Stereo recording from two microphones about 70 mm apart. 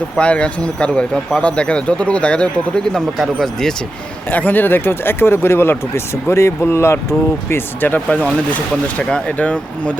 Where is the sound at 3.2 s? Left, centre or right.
Centre.